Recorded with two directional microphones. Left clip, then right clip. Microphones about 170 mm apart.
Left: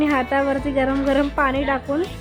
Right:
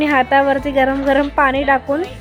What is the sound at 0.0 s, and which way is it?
A woman's voice, 5° right (ahead or behind).